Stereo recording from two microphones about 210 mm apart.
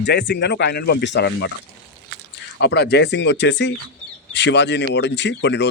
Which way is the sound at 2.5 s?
55° left (ahead or behind).